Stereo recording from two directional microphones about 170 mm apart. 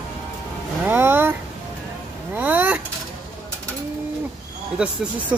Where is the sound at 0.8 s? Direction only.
10° right (ahead or behind).